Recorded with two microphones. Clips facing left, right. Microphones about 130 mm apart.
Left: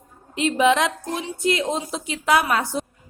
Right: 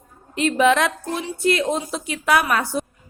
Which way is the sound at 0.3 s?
15° left (ahead or behind).